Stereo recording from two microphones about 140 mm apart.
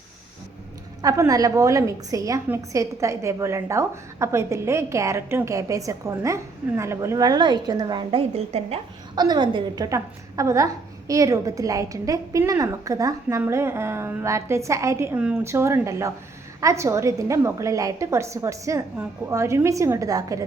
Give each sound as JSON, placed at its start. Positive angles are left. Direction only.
{"t": 1.0, "sound": "a woman's voice", "side_deg": -25}
{"t": 8.5, "sound": "a woman's voice", "side_deg": -50}
{"t": 9.1, "sound": "a woman's voice", "side_deg": -30}